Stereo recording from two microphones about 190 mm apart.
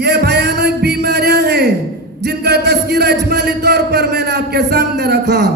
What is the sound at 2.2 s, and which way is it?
Music, 60° right (ahead or behind).